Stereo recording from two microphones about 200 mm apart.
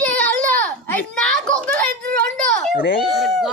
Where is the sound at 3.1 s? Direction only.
Centre (ahead or behind).